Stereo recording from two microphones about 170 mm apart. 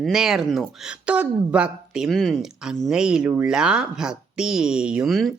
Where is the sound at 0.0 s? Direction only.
Centre (ahead or behind).